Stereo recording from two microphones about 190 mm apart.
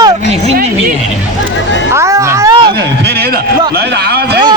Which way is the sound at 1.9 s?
15° right (ahead or behind).